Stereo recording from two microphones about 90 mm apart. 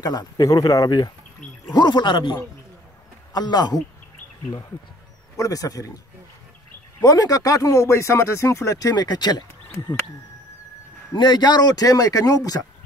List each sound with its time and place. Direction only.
0.0 s speech: 45° left (ahead or behind)
5.4 s speech: 40° left (ahead or behind)
7.0 s speech: 40° left (ahead or behind)
11.1 s speech: 55° left (ahead or behind)